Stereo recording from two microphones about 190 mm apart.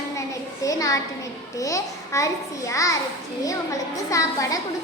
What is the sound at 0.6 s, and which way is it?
A child's voice, 20° left (ahead or behind).